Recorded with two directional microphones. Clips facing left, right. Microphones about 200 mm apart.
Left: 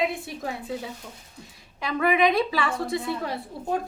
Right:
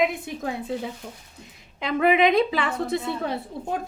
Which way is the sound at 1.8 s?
20° right (ahead or behind).